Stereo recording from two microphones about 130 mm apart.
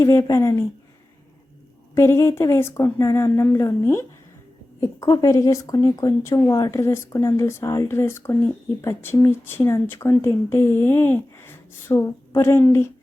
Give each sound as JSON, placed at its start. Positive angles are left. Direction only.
{"t": 0.0, "sound": "speech", "side_deg": 20}
{"t": 2.0, "sound": "speech", "side_deg": 20}